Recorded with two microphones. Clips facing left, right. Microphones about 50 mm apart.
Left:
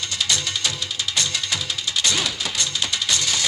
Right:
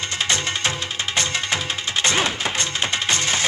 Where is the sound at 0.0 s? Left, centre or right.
Right.